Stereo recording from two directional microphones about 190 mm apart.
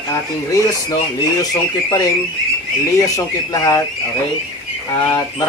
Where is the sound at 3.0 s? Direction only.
15° left (ahead or behind).